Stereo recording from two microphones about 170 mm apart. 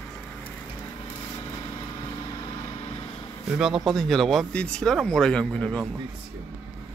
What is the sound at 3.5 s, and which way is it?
Speech, 5° right (ahead or behind).